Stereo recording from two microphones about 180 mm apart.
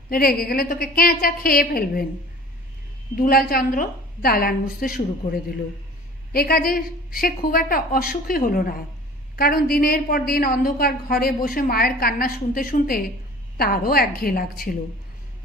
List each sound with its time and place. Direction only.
0.1 s a woman's voice: 55° left (ahead or behind)
3.2 s a woman's voice: 55° left (ahead or behind)